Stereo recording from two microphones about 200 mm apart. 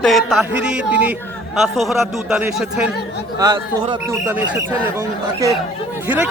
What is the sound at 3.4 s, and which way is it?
Speech, 20° right (ahead or behind).